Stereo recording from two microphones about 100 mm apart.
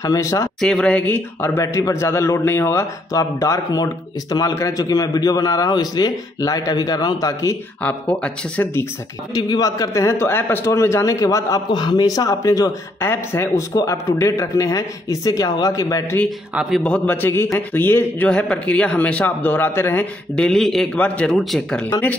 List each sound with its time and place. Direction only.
0.0 s a man's voice: 35° left (ahead or behind)
0.6 s a man's voice: 5° left (ahead or behind); by 7.5 s 35° left (ahead or behind)
7.8 s speech: 15° left (ahead or behind)
9.3 s a man's voice: 40° left (ahead or behind)
11.7 s a man's voice: 45° left (ahead or behind)
16.7 s a man's voice: 10° left (ahead or behind)
18.3 s speech: 10° left (ahead or behind)
20.3 s speech: 5° left (ahead or behind)